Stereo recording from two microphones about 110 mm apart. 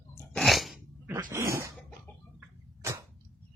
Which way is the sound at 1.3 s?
25° right (ahead or behind).